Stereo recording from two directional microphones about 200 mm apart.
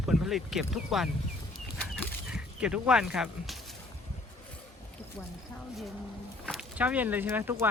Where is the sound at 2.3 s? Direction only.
5° right (ahead or behind).